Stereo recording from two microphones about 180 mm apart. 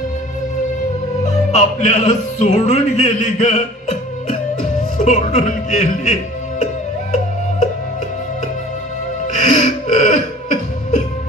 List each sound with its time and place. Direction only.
1.2 s music: 40° left (ahead or behind)
4.9 s a man's voice: 40° left (ahead or behind)
9.3 s music: 45° left (ahead or behind)